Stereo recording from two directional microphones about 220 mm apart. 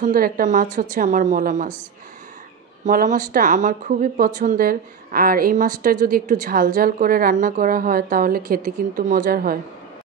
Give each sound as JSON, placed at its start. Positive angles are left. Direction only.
{"t": 0.0, "sound": "speech", "side_deg": -40}
{"t": 2.8, "sound": "speech", "side_deg": -35}